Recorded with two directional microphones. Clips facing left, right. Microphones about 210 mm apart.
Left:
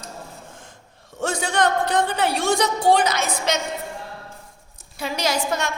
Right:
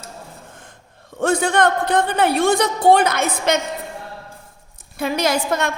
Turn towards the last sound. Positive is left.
turn(degrees=-55)  # may be behind; listen again after turning